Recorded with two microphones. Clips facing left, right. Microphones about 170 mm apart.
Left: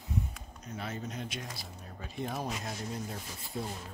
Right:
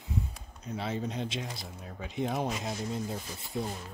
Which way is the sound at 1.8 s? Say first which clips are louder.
Right 4 dB; 90° right.